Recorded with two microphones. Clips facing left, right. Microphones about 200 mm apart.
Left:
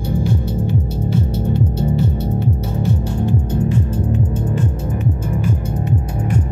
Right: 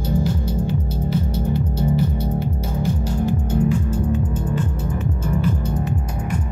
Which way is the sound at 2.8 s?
65° left (ahead or behind).